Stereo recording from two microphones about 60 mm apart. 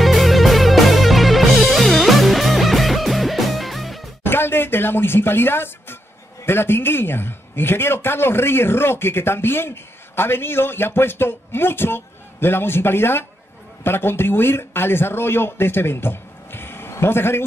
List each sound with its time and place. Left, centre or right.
0.0 s music: centre
4.2 s a man's voice: left